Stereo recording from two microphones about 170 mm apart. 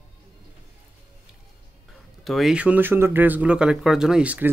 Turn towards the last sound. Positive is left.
turn(degrees=-10)  # may be behind; listen again after turning